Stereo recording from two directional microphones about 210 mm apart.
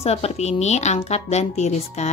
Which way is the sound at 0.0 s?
30° left (ahead or behind).